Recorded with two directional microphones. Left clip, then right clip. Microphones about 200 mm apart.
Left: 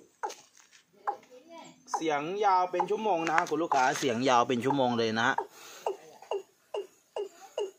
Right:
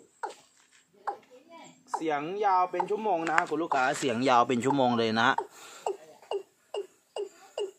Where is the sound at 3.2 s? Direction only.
Centre (ahead or behind).